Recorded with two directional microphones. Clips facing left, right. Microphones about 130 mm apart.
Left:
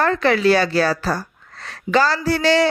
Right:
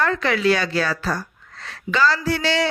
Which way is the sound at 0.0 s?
35° left (ahead or behind).